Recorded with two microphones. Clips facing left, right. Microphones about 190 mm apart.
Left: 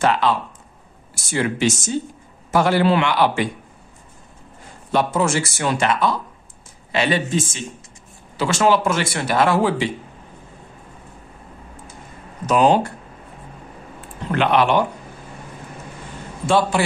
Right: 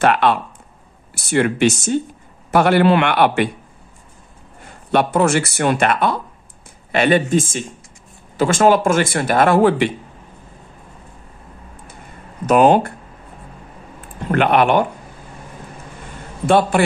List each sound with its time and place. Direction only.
0.0 s speech: 60° right (ahead or behind)
4.6 s speech: 60° right (ahead or behind)
12.4 s speech: 55° right (ahead or behind)
14.3 s speech: 55° right (ahead or behind)
16.4 s speech: 55° right (ahead or behind)